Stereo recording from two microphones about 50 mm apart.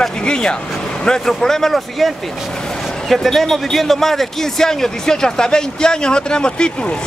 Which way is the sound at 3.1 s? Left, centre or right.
Centre.